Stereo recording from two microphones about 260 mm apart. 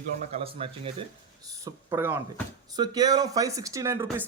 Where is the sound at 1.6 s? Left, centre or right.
Centre.